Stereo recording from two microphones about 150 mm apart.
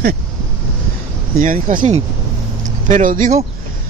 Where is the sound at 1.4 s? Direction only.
65° right (ahead or behind).